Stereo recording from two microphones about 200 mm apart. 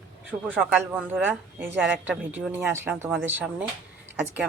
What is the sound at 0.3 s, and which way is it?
Speech, 10° right (ahead or behind).